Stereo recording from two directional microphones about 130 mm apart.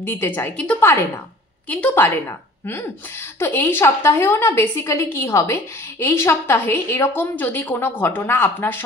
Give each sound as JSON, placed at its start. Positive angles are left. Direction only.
{"t": 0.0, "sound": "a woman's voice", "side_deg": 15}